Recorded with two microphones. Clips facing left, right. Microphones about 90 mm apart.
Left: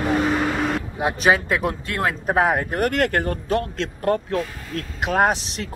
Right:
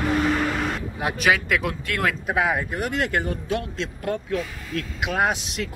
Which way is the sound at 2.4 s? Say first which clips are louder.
Left 5 dB; 45° left (ahead or behind).